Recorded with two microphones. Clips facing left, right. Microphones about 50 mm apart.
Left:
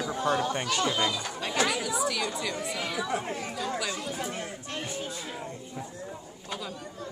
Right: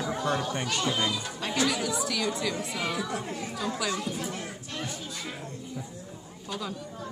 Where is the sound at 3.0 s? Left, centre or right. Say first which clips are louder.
Left 2 dB; left.